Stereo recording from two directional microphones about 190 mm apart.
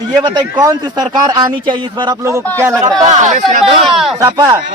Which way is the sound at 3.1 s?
40° right (ahead or behind).